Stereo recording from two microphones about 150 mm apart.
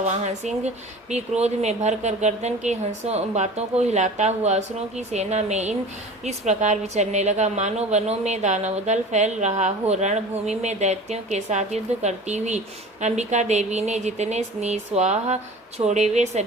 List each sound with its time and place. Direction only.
1.1 s a woman's voice: 50° right (ahead or behind)